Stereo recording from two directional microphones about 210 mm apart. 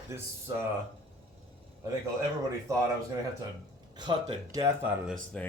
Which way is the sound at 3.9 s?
20° right (ahead or behind).